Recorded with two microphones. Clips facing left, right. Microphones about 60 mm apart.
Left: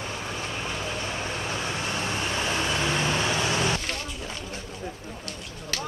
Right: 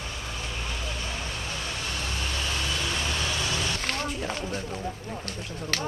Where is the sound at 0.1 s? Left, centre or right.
Left.